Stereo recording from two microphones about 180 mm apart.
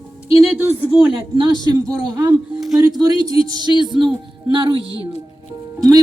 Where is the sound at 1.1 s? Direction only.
25° right (ahead or behind).